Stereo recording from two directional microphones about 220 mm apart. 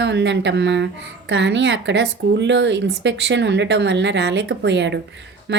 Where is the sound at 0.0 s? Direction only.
55° right (ahead or behind).